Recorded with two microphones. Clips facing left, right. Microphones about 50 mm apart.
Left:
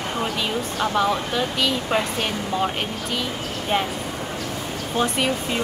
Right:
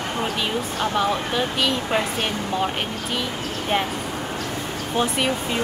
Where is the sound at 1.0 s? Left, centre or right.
Centre.